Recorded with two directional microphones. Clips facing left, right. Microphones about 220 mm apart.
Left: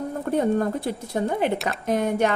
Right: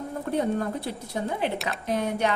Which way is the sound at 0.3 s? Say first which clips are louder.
Left 4 dB; 50° left (ahead or behind).